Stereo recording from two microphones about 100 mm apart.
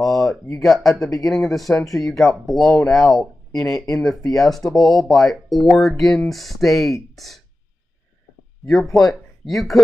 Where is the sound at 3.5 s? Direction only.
35° left (ahead or behind).